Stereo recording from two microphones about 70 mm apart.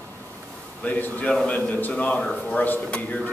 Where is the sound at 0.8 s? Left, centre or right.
Left.